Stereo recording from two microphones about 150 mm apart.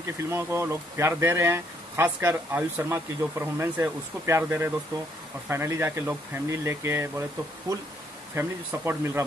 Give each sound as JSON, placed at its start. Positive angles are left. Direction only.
{"t": 0.0, "sound": "speech", "side_deg": -15}
{"t": 8.4, "sound": "speech", "side_deg": -15}